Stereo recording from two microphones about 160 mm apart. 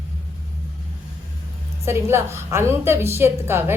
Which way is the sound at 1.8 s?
15° right (ahead or behind).